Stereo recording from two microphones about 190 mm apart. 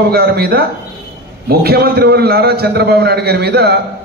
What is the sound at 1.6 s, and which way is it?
A man's voice, 55° right (ahead or behind).